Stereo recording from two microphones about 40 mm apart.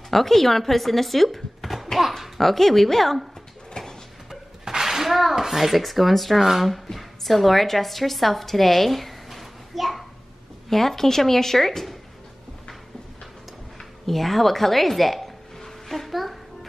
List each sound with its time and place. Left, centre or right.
0.1 s speech: centre
3.8 s a sound: centre
4.3 s shatter: centre
5.3 s speech: centre
6.7 s a woman's voice: centre
13.7 s music: centre